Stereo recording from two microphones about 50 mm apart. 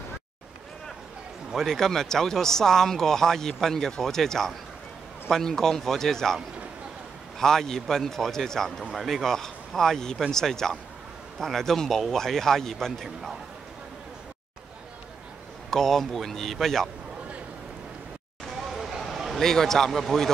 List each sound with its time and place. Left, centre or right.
1.5 s a man's voice: centre
15.7 s a man's voice: centre
18.6 s a sound: centre
19.4 s a man's voice: centre